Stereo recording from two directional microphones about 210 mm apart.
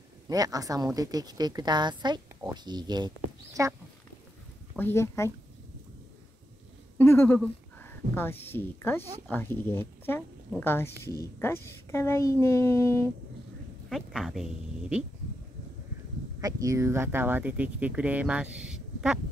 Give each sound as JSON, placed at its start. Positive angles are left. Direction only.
{"t": 0.3, "sound": "a woman's voice", "side_deg": -15}
{"t": 4.7, "sound": "speech", "side_deg": 10}
{"t": 7.0, "sound": "speech", "side_deg": 10}
{"t": 13.8, "sound": "speech", "side_deg": 0}
{"t": 16.3, "sound": "speech", "side_deg": -15}